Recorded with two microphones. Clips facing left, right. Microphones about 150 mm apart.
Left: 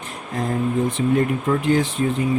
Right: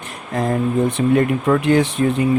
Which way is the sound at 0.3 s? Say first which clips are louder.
Right 3 dB; 70° right (ahead or behind).